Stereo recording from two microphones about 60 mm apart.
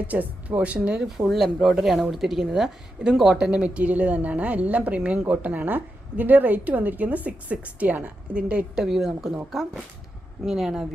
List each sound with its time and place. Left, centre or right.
0.1 s a woman's voice: right
1.0 s a woman's voice: centre
8.8 s a woman's voice: centre
10.4 s speech: centre